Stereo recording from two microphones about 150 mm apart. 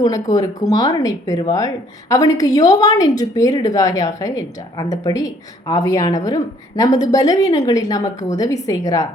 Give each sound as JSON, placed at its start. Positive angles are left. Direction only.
{"t": 0.7, "sound": "a woman's voice", "side_deg": 25}